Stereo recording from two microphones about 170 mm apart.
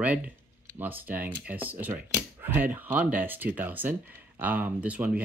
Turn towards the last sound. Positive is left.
turn(degrees=-10)  # may be behind; listen again after turning